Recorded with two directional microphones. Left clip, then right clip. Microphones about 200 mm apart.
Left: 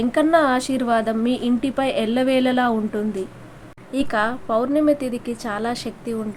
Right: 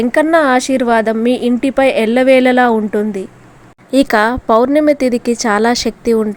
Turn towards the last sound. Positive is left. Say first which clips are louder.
# right 14 dB
turn(degrees=-40)  # may be behind; listen again after turning